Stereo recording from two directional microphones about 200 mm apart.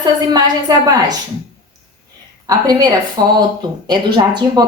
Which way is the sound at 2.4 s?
20° right (ahead or behind).